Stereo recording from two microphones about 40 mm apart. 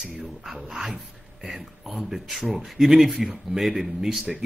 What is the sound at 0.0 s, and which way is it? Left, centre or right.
Speech, right.